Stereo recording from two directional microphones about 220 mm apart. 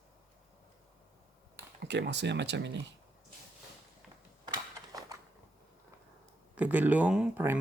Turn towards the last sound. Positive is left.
turn(degrees=-10)  # may be behind; listen again after turning